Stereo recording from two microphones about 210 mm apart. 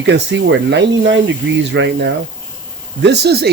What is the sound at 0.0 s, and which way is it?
Speech, 55° right (ahead or behind).